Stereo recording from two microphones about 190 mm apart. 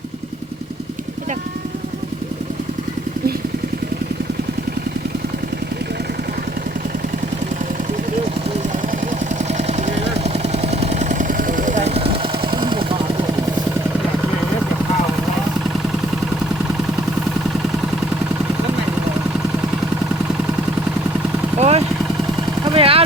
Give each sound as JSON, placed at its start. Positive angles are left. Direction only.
{"t": 9.4, "sound": "vehicle", "side_deg": -35}
{"t": 21.6, "sound": "vehicle", "side_deg": -35}
{"t": 22.7, "sound": "a sound", "side_deg": -30}